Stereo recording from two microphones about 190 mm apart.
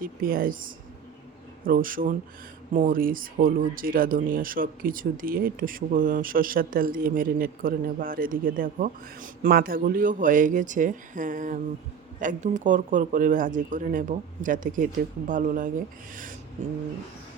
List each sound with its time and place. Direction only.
0.0 s speech: 50° right (ahead or behind)